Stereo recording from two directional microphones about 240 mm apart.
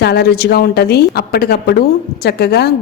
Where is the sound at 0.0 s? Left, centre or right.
Left.